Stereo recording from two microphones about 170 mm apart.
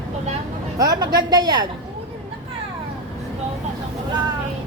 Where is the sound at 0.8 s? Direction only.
20° right (ahead or behind).